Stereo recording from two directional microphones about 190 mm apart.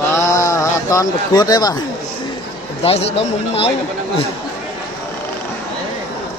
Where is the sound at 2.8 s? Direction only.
30° left (ahead or behind).